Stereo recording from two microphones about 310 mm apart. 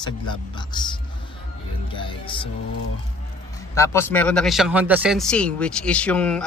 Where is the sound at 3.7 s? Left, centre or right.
Centre.